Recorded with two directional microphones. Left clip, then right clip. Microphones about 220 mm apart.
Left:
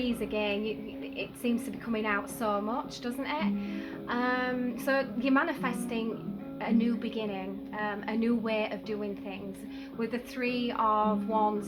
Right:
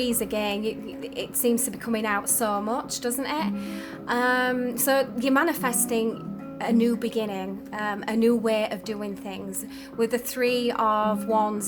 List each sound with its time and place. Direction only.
0.0 s a woman's voice: 50° right (ahead or behind)